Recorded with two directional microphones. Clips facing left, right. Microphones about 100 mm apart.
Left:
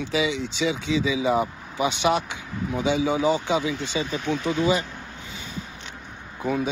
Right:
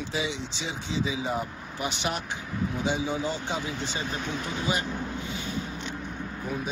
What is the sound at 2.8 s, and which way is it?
Speech, 80° left.